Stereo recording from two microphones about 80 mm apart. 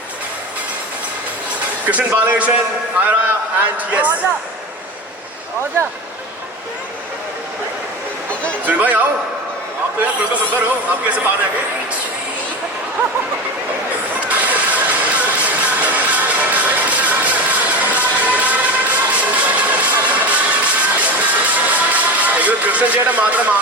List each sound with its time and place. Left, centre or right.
1.9 s speech: right
3.6 s speech: right
8.6 s speech: right
14.2 s music: centre